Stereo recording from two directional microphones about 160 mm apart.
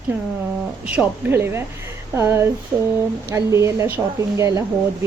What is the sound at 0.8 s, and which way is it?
A woman's voice, 10° right (ahead or behind).